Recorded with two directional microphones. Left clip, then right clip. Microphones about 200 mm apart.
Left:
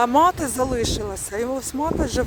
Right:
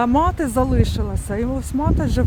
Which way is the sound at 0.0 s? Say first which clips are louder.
Left 1 dB; 20° left (ahead or behind).